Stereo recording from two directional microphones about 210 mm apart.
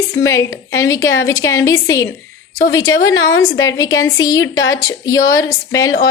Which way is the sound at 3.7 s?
15° left (ahead or behind).